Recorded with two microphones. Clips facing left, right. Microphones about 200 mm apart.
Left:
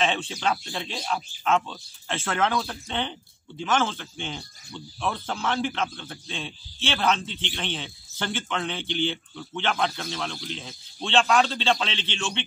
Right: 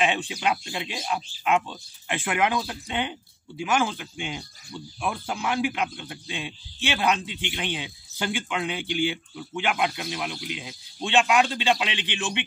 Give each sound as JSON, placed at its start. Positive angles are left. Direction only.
{"t": 0.0, "sound": "speech", "side_deg": -15}